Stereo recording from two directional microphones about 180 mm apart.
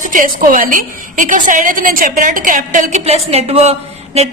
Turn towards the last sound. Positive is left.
turn(degrees=-35)  # may be behind; listen again after turning